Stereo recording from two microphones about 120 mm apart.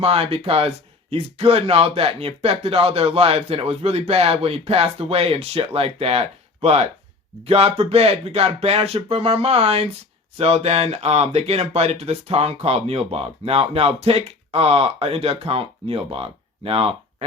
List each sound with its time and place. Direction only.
0.0 s speech: 55° right (ahead or behind)